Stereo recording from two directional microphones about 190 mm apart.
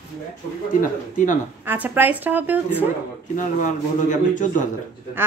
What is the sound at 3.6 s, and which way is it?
Speech, 40° left (ahead or behind).